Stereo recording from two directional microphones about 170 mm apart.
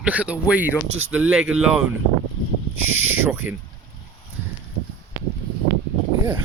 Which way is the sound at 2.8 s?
10° right (ahead or behind).